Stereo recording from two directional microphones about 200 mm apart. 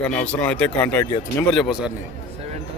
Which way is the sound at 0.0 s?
5° left (ahead or behind).